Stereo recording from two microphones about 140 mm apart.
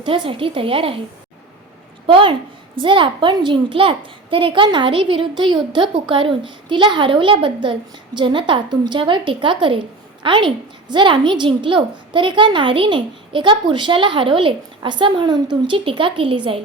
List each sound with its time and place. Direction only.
0.3 s a child's voice: 40° right (ahead or behind)
2.0 s a child's voice: 40° right (ahead or behind)